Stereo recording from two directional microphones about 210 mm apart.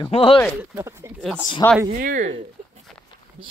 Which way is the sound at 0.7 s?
15° right (ahead or behind).